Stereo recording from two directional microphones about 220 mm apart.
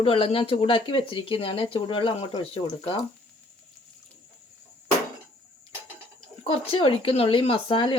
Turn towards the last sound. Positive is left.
turn(degrees=25)  # may be behind; listen again after turning